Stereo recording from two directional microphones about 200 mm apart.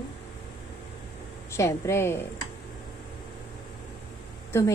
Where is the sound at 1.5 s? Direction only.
15° left (ahead or behind).